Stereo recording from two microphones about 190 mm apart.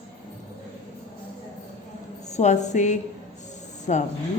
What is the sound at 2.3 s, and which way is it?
A woman's voice, 35° left (ahead or behind).